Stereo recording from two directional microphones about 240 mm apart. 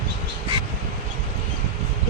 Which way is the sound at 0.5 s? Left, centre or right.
Right.